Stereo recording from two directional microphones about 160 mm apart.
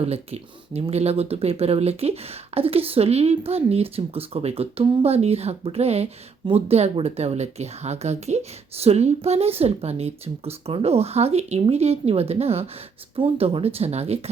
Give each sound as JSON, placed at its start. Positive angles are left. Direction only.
{"t": 0.0, "sound": "speech", "side_deg": -40}